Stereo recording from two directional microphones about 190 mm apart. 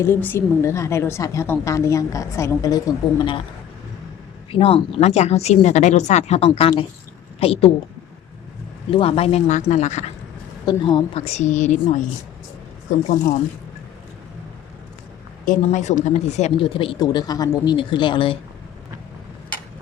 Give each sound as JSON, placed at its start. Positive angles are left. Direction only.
{"t": 0.0, "sound": "a woman's voice", "side_deg": 10}
{"t": 4.5, "sound": "a woman's voice", "side_deg": 30}
{"t": 8.9, "sound": "speech", "side_deg": 30}
{"t": 10.7, "sound": "speech", "side_deg": 25}
{"t": 15.4, "sound": "speech", "side_deg": 40}